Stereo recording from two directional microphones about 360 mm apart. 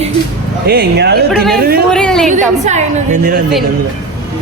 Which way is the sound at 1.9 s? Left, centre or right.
Centre.